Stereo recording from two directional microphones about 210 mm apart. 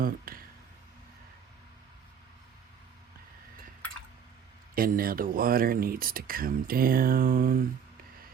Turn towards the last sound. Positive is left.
turn(degrees=-45)  # may be behind; listen again after turning